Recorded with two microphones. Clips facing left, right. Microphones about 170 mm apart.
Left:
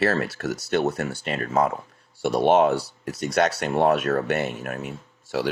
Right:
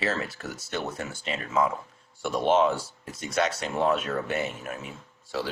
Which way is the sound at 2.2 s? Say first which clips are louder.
Left 4 dB; 65° left (ahead or behind).